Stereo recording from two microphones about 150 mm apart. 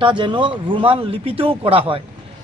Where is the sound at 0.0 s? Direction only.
30° right (ahead or behind).